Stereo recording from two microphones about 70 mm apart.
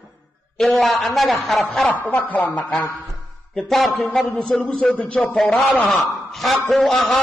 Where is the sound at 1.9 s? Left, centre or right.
Left.